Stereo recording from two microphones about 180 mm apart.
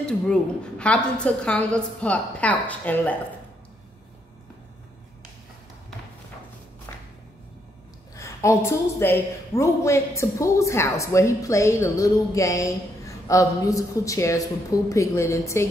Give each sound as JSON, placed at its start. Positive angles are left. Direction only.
{"t": 0.0, "sound": "a woman's voice", "side_deg": 5}
{"t": 6.9, "sound": "music", "side_deg": 15}
{"t": 8.2, "sound": "a woman's voice", "side_deg": 15}